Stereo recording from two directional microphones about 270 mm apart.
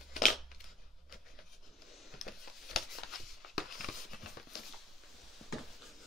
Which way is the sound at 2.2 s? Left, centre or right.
Left.